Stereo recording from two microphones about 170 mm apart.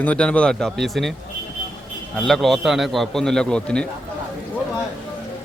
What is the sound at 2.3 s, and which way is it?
A man's voice, centre (ahead or behind).